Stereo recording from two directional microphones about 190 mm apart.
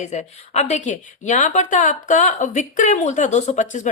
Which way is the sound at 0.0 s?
40° left (ahead or behind).